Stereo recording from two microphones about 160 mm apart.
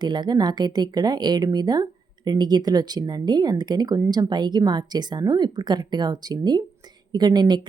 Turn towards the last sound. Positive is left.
turn(degrees=-25)  # may be behind; listen again after turning